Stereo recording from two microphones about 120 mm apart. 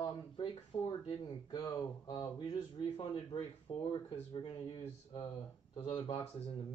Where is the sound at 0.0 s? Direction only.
40° left (ahead or behind).